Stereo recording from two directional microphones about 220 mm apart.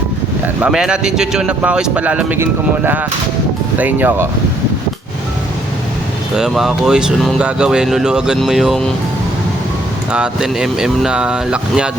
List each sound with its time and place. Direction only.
0.6 s speech: 5° right (ahead or behind)
6.3 s speech: centre (ahead or behind)
10.1 s speech: 5° right (ahead or behind)